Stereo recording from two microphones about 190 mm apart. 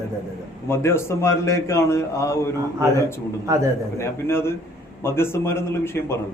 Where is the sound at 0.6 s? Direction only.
15° left (ahead or behind).